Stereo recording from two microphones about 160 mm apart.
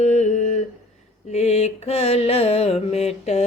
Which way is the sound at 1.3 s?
45° left (ahead or behind).